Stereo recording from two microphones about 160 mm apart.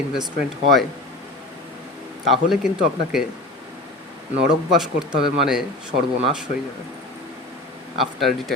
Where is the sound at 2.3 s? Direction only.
Centre (ahead or behind).